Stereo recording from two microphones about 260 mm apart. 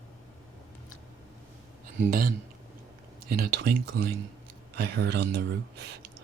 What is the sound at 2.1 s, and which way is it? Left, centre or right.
Speech, right.